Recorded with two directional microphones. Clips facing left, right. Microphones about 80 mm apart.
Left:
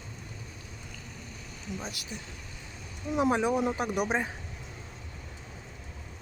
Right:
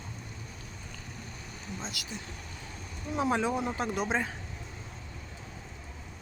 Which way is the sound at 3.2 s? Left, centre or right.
Centre.